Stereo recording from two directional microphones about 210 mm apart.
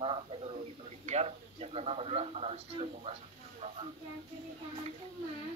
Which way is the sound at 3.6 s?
30° right (ahead or behind).